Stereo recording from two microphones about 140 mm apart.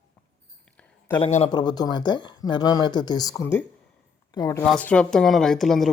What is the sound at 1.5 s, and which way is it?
Speech, 30° left (ahead or behind).